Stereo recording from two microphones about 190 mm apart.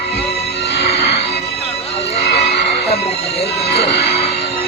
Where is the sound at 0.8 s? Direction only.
30° left (ahead or behind).